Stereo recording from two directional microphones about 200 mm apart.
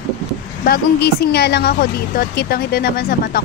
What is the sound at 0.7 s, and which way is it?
Speech, 55° left (ahead or behind).